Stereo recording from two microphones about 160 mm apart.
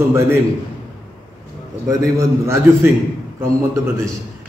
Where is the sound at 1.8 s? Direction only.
20° right (ahead or behind).